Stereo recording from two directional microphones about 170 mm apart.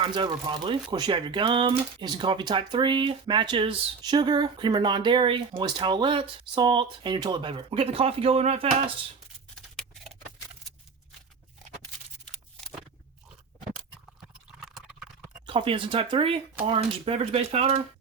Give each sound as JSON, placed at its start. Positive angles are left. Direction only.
{"t": 0.0, "sound": "speech", "side_deg": -30}
{"t": 15.4, "sound": "speech", "side_deg": -30}